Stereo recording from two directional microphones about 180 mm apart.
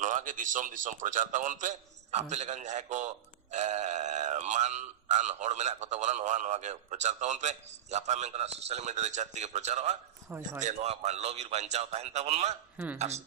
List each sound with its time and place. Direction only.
0.0 s a man's voice: 45° right (ahead or behind)
12.7 s a man's voice: 10° right (ahead or behind)
13.0 s speech: 35° right (ahead or behind)